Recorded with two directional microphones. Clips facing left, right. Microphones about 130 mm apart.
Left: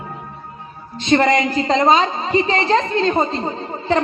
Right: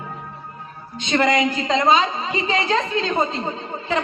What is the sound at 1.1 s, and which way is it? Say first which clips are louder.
A man's voice: left 4 dB; 40° left (ahead or behind).